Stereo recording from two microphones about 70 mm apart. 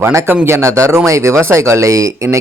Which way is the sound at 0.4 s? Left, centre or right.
Right.